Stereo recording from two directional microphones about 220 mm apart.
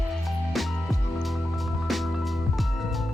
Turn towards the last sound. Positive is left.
turn(degrees=0)  # may be behind; listen again after turning